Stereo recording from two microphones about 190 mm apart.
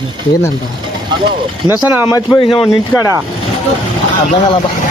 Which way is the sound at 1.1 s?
20° right (ahead or behind).